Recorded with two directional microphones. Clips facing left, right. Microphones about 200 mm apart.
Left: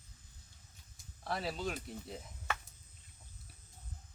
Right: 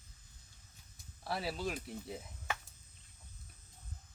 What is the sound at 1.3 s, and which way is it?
Speech, 5° right (ahead or behind).